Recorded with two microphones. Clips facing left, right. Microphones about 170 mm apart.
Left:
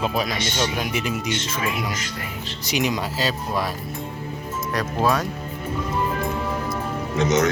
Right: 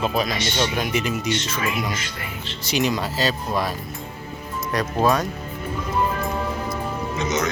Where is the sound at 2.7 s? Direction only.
10° left (ahead or behind).